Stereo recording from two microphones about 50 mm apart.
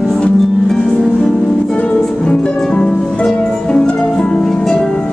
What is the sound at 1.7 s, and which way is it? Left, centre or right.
Music, left.